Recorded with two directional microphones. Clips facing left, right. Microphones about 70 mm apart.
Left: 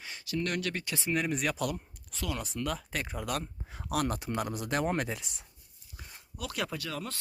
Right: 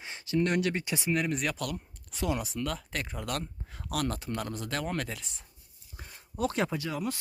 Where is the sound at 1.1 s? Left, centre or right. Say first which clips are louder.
Even; centre.